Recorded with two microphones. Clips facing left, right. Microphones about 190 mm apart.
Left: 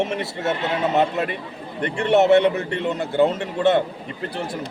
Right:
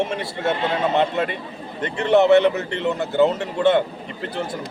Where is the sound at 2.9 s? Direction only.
25° left (ahead or behind).